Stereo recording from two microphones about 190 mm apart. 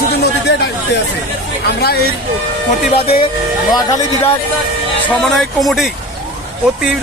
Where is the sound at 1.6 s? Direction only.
55° left (ahead or behind).